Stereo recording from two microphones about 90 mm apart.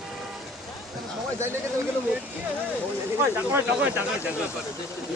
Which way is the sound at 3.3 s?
15° right (ahead or behind).